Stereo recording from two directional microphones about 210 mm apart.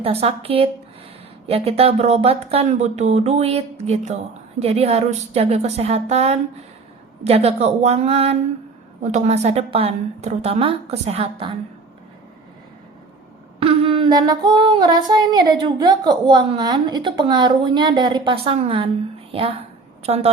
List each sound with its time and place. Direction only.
0.0 s female singing: 30° right (ahead or behind)
1.5 s speech: 30° right (ahead or behind)
7.3 s female singing: 30° right (ahead or behind)
9.0 s speech: 35° right (ahead or behind)
13.6 s female singing: 25° right (ahead or behind)
19.3 s speech: 25° right (ahead or behind)
20.1 s female singing: 30° right (ahead or behind)